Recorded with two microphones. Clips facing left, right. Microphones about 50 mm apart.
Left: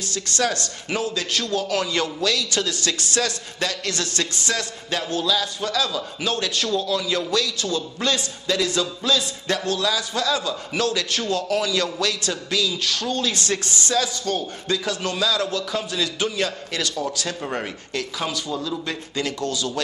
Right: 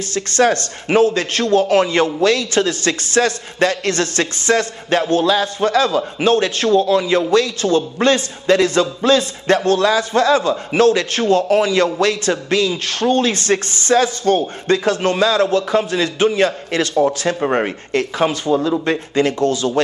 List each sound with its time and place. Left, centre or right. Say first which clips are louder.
0.0 s a man's voice: right 9 dB; right